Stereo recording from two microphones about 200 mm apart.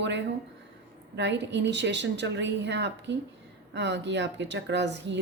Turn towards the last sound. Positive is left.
turn(degrees=-60)  # may be behind; listen again after turning